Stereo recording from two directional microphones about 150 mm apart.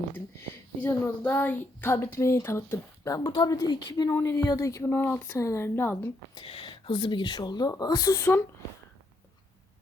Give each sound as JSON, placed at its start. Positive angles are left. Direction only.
{"t": 0.3, "sound": "a woman's voice", "side_deg": 15}
{"t": 6.3, "sound": "speech", "side_deg": 35}